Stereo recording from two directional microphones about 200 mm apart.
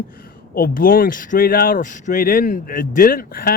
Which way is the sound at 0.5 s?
45° left (ahead or behind).